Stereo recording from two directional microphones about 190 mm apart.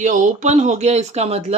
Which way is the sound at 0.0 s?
40° right (ahead or behind).